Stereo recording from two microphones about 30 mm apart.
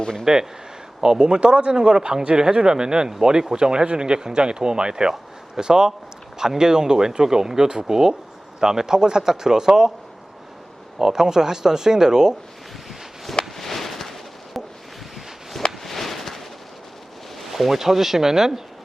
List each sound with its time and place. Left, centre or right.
0.3 s speech: centre
1.2 s speech: right
10.9 s speech: centre
13.6 s a sound: centre
15.8 s a sound: centre
17.3 s speech: centre